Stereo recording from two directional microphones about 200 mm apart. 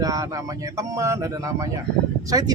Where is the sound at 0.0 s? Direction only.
20° right (ahead or behind).